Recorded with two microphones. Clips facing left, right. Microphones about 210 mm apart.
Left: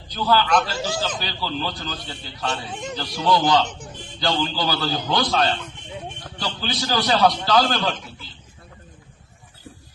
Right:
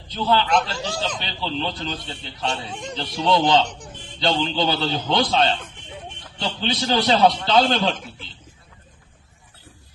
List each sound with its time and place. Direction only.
0.1 s a man's voice: 25° right (ahead or behind)
0.7 s speech: 5° left (ahead or behind)
1.2 s a man's voice: 25° right (ahead or behind)
2.6 s speech: 5° left (ahead or behind)
3.2 s a man's voice: 25° right (ahead or behind)
3.6 s speech: 5° left (ahead or behind)
4.2 s a man's voice: 25° right (ahead or behind)